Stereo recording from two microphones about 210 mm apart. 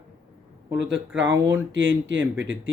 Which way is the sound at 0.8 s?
60° right (ahead or behind).